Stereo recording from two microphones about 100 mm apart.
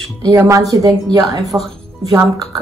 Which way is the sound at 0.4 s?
35° right (ahead or behind).